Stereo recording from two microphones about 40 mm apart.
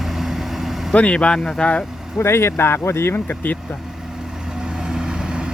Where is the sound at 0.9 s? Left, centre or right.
Left.